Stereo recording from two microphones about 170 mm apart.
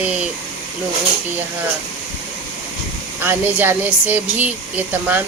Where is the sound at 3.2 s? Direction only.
10° right (ahead or behind).